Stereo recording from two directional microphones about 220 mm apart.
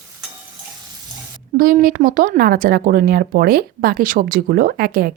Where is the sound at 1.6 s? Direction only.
40° right (ahead or behind).